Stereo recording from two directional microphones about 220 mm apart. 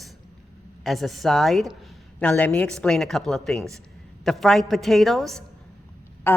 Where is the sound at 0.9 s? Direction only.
Centre (ahead or behind).